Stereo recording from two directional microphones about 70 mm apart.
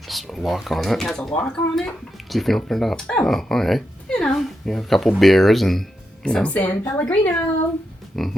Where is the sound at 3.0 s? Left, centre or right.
Centre.